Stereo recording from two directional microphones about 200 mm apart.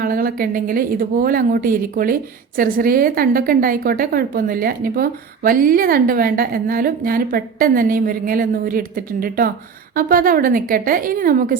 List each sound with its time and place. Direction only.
0.0 s a woman's voice: 45° right (ahead or behind)